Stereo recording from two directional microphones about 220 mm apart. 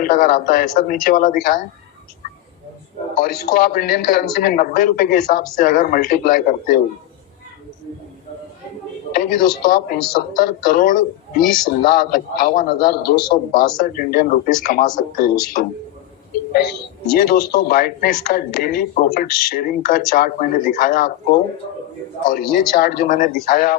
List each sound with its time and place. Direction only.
0.0 s a man's voice: 40° left (ahead or behind)
3.2 s a man's voice: 45° left (ahead or behind)
9.1 s a man's voice: 40° left (ahead or behind)
22.3 s a man's voice: 40° left (ahead or behind)